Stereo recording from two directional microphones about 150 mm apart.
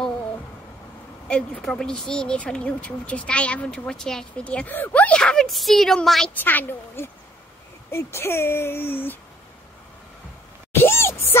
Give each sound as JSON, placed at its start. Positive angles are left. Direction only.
{"t": 1.2, "sound": "a woman's voice", "side_deg": 5}
{"t": 10.7, "sound": "music", "side_deg": 15}